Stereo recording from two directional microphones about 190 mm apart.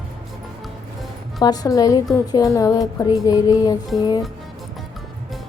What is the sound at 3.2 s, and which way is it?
Speech, 20° left (ahead or behind).